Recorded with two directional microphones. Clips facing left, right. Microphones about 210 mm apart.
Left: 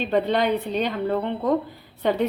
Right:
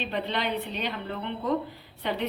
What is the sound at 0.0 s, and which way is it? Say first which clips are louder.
A woman's voice: left 9 dB; 45° left (ahead or behind).